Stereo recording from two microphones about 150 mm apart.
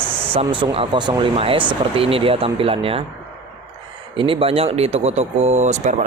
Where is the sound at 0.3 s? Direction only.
35° right (ahead or behind).